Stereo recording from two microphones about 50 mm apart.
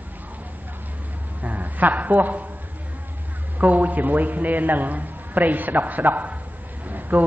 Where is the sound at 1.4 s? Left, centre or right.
Right.